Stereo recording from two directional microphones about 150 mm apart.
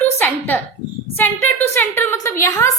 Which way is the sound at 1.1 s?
15° left (ahead or behind).